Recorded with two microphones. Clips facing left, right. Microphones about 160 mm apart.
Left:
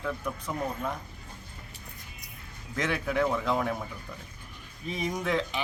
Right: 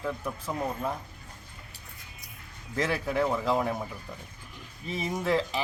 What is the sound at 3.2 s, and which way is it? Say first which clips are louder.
Speech: right 1 dB; 5° right (ahead or behind).